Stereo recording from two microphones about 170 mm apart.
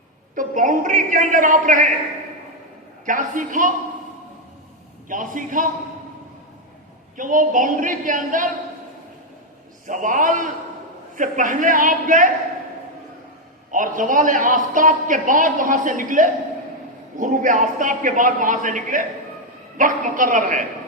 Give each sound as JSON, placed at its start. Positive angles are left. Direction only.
{"t": 0.3, "sound": "a man's voice", "side_deg": -50}
{"t": 3.1, "sound": "a man's voice", "side_deg": -50}
{"t": 5.0, "sound": "a man's voice", "side_deg": -50}
{"t": 7.2, "sound": "a man's voice", "side_deg": -50}
{"t": 9.8, "sound": "a man's voice", "side_deg": -50}
{"t": 13.7, "sound": "a man's voice", "side_deg": -50}